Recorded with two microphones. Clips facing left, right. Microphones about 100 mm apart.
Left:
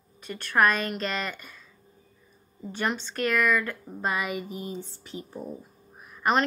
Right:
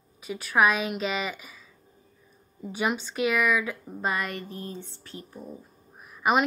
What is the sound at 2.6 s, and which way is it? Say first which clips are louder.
Speech: right 1 dB; 5° right (ahead or behind).